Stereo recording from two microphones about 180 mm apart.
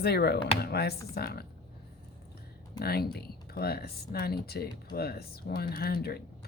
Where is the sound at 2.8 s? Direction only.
60° left (ahead or behind).